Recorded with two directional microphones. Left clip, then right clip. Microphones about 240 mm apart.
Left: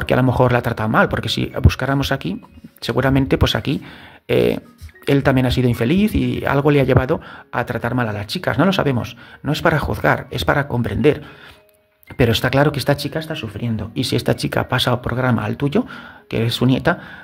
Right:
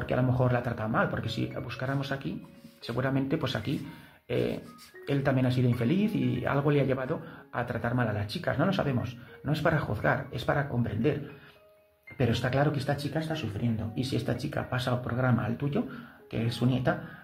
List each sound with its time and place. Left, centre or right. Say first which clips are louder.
0.0 s speech: left 13 dB; left
12.2 s speech: left 12 dB; left